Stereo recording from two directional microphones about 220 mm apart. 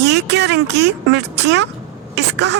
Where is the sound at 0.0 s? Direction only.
50° right (ahead or behind).